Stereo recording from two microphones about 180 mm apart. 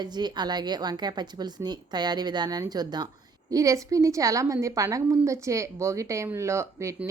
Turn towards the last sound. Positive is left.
turn(degrees=-15)  # may be behind; listen again after turning